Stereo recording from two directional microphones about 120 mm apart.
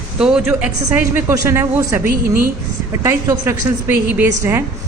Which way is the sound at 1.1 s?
25° right (ahead or behind).